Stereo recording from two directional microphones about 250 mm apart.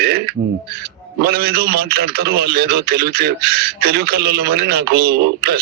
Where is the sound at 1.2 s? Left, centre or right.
Right.